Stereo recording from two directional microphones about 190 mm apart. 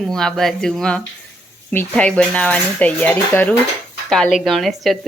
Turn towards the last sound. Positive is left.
turn(degrees=0)  # may be behind; listen again after turning